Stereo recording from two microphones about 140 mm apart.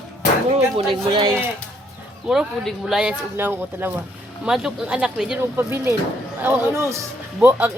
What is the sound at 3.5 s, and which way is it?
Speech, 15° right (ahead or behind).